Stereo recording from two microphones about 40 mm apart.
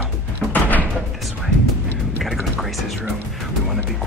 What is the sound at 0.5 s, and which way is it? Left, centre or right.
Door, left.